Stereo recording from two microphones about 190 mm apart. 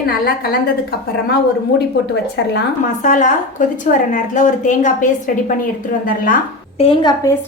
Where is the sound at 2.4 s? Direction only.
65° left (ahead or behind).